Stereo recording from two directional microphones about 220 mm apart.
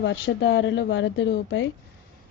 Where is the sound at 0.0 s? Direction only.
55° left (ahead or behind).